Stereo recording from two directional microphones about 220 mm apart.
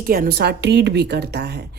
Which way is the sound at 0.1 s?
45° right (ahead or behind).